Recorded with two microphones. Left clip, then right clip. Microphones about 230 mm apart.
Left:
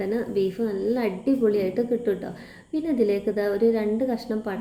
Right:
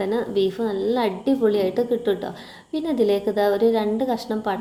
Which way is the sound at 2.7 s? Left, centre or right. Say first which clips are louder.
Right 3 dB; centre.